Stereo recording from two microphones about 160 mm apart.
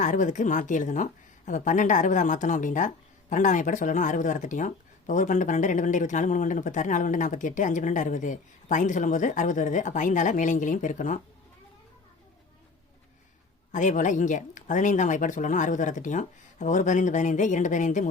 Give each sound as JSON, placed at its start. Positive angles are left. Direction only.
{"t": 0.0, "sound": "speech", "side_deg": 50}
{"t": 13.7, "sound": "speech", "side_deg": 50}